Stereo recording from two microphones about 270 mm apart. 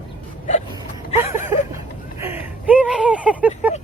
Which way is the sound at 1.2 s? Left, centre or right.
Centre.